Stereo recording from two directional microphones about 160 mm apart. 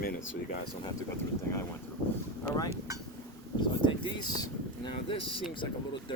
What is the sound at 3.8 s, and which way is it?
Speech, 25° left (ahead or behind).